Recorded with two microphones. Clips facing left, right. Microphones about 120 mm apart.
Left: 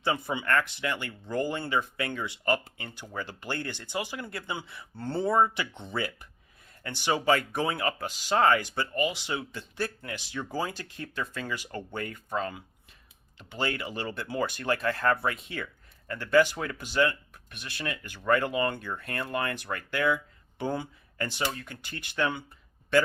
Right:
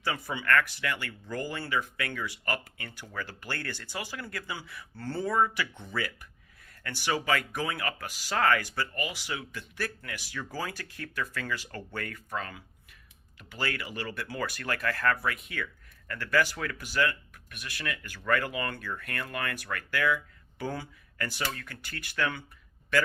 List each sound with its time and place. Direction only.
0.0 s speech: 25° left (ahead or behind)